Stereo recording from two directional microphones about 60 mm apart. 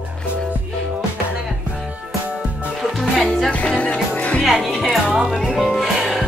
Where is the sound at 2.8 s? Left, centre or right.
Centre.